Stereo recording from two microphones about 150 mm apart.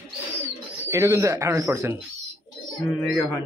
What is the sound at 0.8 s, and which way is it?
Speech, 20° right (ahead or behind).